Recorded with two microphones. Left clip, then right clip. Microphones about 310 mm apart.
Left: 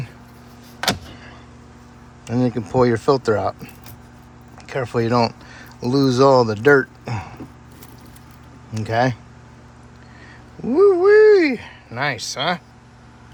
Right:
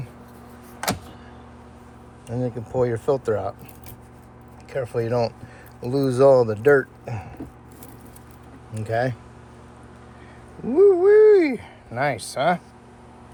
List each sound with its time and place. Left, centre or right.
2.2 s speech: centre
4.7 s speech: centre
8.7 s speech: centre
10.7 s a sound: centre